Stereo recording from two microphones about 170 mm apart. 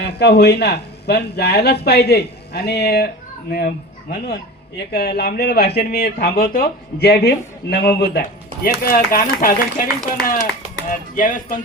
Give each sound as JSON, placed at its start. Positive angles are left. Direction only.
{"t": 0.0, "sound": "speech", "side_deg": 75}
{"t": 4.9, "sound": "speech", "side_deg": 70}
{"t": 8.6, "sound": "speech", "side_deg": 60}